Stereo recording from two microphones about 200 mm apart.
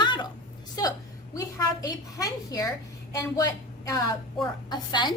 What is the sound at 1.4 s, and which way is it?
A woman's voice, 15° left (ahead or behind).